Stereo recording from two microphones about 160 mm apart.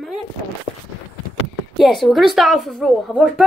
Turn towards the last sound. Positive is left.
turn(degrees=-5)  # may be behind; listen again after turning